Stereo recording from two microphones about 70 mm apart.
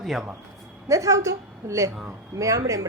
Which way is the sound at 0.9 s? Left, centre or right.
Right.